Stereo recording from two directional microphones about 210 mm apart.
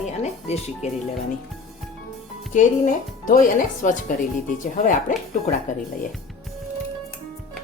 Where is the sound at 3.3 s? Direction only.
40° left (ahead or behind).